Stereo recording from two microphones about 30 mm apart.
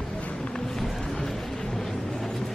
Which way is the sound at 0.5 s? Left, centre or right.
Centre.